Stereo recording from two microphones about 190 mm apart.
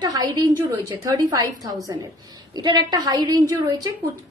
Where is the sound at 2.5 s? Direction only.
20° right (ahead or behind).